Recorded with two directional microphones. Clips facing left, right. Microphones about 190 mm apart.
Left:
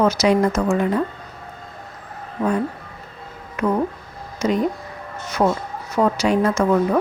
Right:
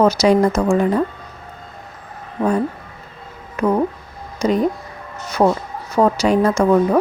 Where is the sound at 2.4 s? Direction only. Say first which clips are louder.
Right 3 dB; 30° right (ahead or behind).